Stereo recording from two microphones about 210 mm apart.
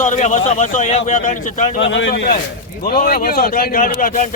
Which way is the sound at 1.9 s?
55° left (ahead or behind).